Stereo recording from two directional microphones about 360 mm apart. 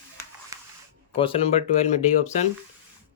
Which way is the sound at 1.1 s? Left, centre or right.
Centre.